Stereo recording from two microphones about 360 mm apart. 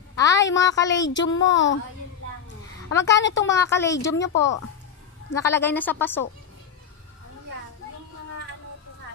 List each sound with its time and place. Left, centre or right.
0.1 s a sound: centre
0.6 s speech: centre
1.1 s speech: left
3.0 s a woman's voice: left
3.5 s speech: centre
4.4 s a woman's voice: left
5.4 s a woman's voice: centre